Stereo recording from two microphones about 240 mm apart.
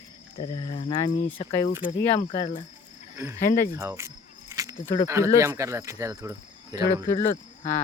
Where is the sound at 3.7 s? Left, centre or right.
Centre.